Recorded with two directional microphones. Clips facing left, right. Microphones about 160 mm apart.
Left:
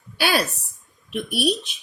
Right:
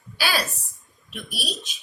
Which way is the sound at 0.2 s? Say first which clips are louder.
Left 4 dB; 60° left (ahead or behind).